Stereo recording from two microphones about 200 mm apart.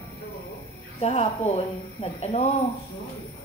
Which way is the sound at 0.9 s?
30° left (ahead or behind).